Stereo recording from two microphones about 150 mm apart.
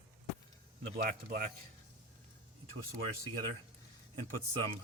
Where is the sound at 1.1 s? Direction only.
70° right (ahead or behind).